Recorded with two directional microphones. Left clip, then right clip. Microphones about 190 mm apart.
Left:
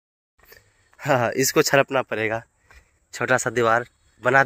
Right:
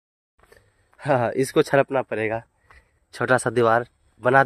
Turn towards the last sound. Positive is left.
turn(degrees=-20)  # may be behind; listen again after turning